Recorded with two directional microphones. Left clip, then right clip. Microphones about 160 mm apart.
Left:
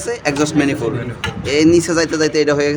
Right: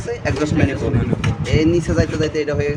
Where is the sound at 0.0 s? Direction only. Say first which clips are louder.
Left 4 dB; 85° left.